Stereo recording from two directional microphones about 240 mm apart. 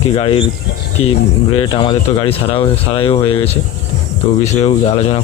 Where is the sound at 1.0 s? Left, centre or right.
Left.